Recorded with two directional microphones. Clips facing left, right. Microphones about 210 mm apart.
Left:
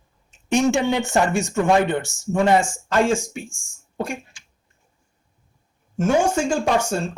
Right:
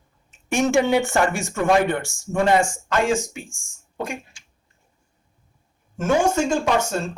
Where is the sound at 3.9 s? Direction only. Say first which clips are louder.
Left 2 dB; 30° left (ahead or behind).